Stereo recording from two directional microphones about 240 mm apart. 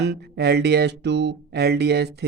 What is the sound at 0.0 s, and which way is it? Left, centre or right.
Speech, right.